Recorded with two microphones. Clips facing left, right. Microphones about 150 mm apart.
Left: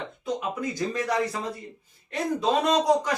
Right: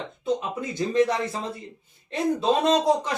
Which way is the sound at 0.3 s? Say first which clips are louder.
Even; 25° right (ahead or behind).